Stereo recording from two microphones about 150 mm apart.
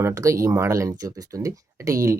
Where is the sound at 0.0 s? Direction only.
20° right (ahead or behind).